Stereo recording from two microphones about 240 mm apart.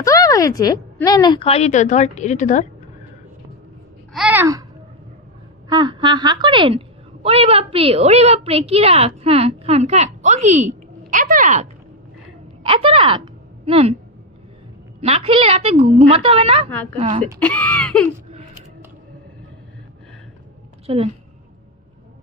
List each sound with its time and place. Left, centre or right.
0.0 s a woman's voice: centre; by 2.6 s left
4.1 s a child's voice: centre
5.7 s a woman's voice: centre; by 11.6 s right
12.6 s a woman's voice: right
15.0 s a woman's voice: right
17.4 s speech: centre
20.8 s a woman's voice: right